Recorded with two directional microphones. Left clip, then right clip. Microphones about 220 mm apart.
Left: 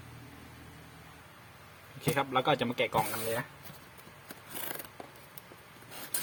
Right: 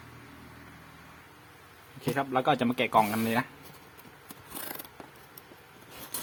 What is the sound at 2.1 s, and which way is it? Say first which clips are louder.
Speech: right 2 dB; 15° right (ahead or behind).